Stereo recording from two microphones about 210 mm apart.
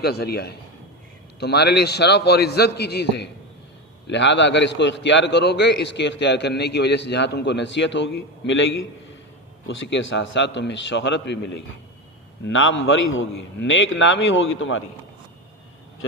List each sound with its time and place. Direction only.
0.0 s a man's voice: 50° left (ahead or behind)
12.5 s a man's voice: 65° left (ahead or behind)